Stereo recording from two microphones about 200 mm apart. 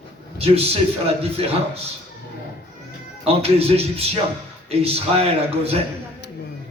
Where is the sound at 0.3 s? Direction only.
30° right (ahead or behind).